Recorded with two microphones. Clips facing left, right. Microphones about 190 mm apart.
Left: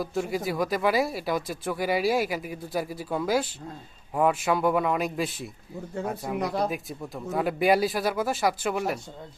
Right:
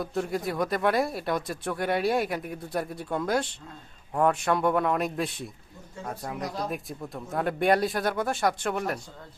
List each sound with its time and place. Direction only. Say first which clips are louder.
0.0 s speech: left 1 dB; centre (ahead or behind)
6.4 s speech: left 6 dB; 60° left (ahead or behind)
6.7 s speech: left 1 dB; centre (ahead or behind)